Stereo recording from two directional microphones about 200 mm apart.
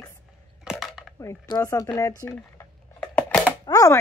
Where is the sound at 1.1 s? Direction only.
15° left (ahead or behind).